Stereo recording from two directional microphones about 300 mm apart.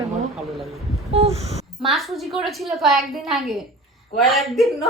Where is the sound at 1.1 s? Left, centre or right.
Centre.